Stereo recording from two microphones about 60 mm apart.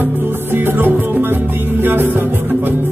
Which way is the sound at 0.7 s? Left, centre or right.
Right.